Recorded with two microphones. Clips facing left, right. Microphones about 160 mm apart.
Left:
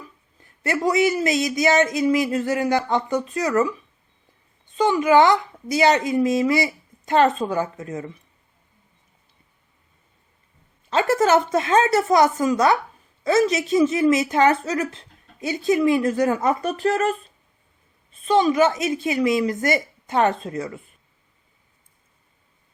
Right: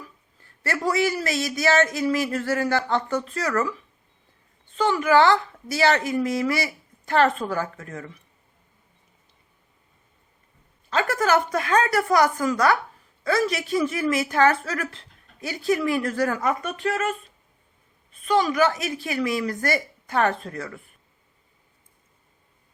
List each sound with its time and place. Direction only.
0.0 s a woman's voice: 20° left (ahead or behind)
10.8 s a woman's voice: 25° left (ahead or behind)
18.1 s a woman's voice: 25° left (ahead or behind)